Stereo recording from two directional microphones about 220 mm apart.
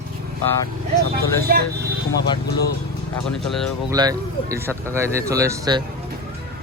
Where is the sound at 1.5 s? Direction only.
45° right (ahead or behind).